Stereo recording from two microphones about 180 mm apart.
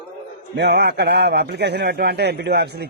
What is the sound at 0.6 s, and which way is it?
A man's voice, 65° right (ahead or behind).